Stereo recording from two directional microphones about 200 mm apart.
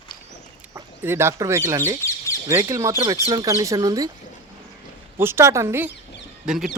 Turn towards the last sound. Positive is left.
turn(degrees=-5)  # may be behind; listen again after turning